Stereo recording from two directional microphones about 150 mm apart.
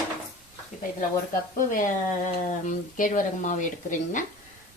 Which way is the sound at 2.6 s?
60° left (ahead or behind).